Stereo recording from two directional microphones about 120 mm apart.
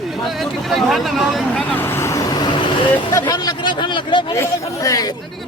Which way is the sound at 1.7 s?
20° left (ahead or behind).